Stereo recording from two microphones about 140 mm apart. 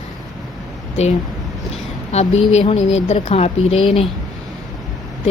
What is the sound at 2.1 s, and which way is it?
Speech, 50° left (ahead or behind).